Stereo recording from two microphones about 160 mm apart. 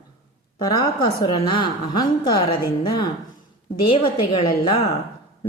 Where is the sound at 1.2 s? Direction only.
30° left (ahead or behind).